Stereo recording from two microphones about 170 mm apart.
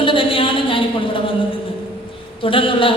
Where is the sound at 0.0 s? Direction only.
30° left (ahead or behind).